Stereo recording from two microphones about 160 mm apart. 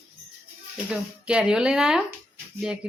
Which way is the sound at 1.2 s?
5° right (ahead or behind).